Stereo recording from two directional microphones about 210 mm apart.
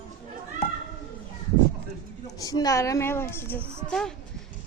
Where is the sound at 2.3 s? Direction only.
15° left (ahead or behind).